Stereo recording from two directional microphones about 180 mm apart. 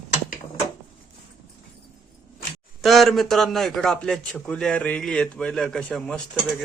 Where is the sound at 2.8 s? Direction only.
Centre (ahead or behind).